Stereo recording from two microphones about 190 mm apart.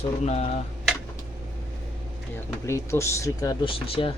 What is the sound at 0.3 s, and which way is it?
Speech, 35° left (ahead or behind).